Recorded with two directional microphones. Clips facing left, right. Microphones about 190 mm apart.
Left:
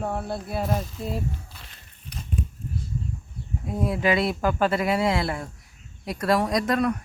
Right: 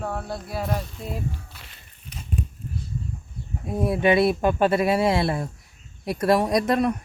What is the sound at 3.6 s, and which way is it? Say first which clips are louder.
A woman's voice: right 3 dB; 25° right (ahead or behind).